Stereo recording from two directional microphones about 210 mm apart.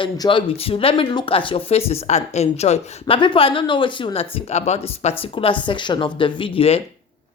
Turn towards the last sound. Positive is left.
turn(degrees=30)  # may be behind; listen again after turning